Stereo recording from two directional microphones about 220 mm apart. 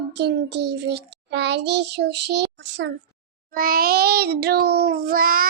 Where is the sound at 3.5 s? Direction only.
40° right (ahead or behind).